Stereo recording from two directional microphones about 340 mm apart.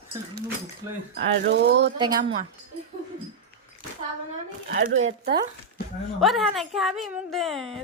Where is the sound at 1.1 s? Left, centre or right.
Right.